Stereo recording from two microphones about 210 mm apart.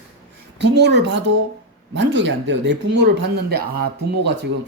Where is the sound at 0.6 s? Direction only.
55° right (ahead or behind).